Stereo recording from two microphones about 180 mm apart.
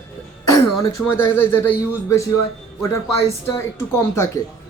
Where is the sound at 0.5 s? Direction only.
15° left (ahead or behind).